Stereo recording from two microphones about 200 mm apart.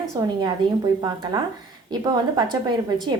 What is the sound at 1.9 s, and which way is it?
Speech, 20° right (ahead or behind).